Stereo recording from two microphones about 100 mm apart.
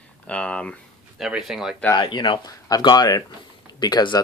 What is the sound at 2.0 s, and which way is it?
Speech, 55° left (ahead or behind).